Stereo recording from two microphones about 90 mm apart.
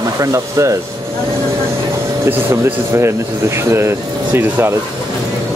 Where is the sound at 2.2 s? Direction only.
25° right (ahead or behind).